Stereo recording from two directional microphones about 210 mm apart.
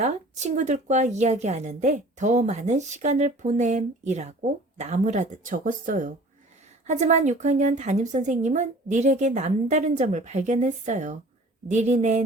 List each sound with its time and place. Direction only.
0.0 s a woman's voice: 35° right (ahead or behind)